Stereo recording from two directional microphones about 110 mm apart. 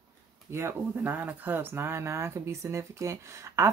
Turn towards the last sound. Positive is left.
turn(degrees=-25)  # may be behind; listen again after turning